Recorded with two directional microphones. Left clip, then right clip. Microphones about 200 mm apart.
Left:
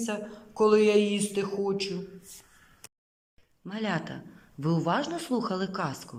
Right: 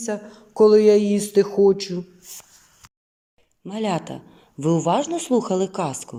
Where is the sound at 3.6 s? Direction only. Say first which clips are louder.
Right 7 dB; 20° right (ahead or behind).